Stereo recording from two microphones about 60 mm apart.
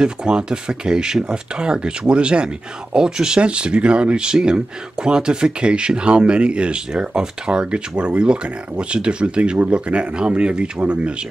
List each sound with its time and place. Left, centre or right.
0.0 s speech: centre